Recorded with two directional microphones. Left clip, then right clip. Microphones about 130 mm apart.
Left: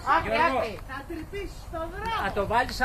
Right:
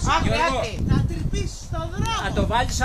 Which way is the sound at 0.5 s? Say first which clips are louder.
Right 3 dB; 30° right (ahead or behind).